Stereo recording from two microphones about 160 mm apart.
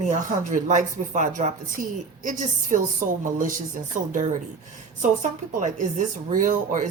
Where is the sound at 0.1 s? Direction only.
50° right (ahead or behind).